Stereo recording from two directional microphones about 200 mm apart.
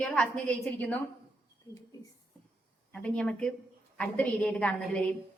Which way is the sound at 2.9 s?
5° left (ahead or behind).